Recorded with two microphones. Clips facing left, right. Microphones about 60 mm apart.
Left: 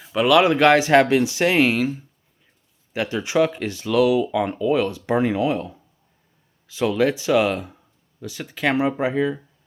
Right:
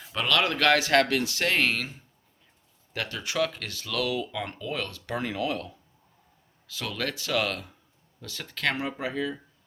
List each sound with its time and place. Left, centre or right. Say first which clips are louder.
0.0 s speech: left 10 dB; centre
2.9 s speech: left 9 dB; centre